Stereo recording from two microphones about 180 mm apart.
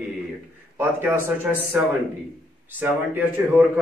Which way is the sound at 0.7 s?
10° right (ahead or behind).